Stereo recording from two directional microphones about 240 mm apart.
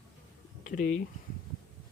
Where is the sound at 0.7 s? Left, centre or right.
Left.